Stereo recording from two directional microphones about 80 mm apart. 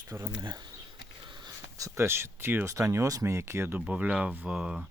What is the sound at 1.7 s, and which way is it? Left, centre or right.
Speech, right.